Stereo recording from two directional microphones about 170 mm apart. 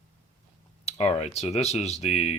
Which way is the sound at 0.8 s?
40° left (ahead or behind).